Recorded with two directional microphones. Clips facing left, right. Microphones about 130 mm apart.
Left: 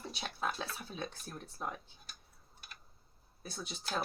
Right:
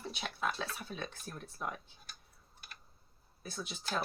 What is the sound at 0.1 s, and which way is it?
Speech, 35° left (ahead or behind).